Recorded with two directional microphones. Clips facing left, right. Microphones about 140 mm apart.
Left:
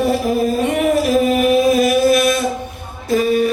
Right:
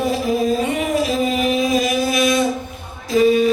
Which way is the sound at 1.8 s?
55° left (ahead or behind).